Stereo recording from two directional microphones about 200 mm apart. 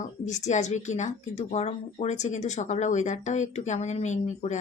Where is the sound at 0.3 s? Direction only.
35° left (ahead or behind).